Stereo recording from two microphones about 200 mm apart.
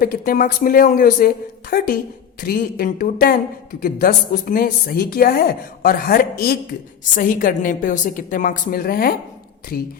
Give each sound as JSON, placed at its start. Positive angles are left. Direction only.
{"t": 0.0, "sound": "a woman's voice", "side_deg": 45}